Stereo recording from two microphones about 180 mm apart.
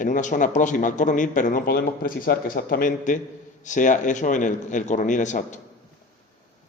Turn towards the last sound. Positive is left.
turn(degrees=45)  # may be behind; listen again after turning